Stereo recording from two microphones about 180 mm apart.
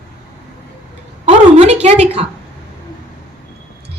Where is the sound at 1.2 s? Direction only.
35° right (ahead or behind).